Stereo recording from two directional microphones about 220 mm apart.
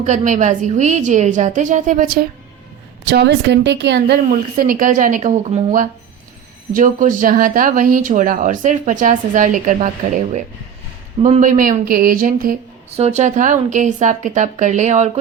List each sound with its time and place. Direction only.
0.0 s speech: 35° right (ahead or behind)
3.1 s speech: 50° right (ahead or behind); by 15.2 s 30° right (ahead or behind)